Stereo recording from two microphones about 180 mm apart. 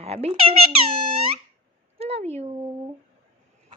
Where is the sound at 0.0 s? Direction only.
35° right (ahead or behind).